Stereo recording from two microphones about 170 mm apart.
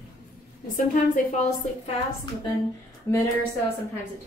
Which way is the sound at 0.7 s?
45° left (ahead or behind).